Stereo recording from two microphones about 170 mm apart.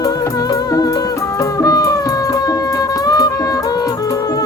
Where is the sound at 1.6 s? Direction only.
20° left (ahead or behind).